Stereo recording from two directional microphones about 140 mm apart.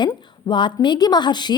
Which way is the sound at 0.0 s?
30° left (ahead or behind).